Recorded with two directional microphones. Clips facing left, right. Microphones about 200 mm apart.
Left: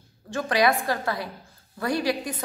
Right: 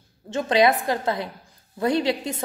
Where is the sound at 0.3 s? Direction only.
20° right (ahead or behind).